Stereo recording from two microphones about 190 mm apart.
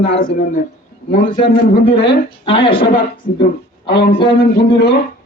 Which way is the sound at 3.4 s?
60° left (ahead or behind).